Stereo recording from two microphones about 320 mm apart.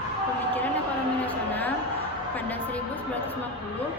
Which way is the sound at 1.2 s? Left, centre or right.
Centre.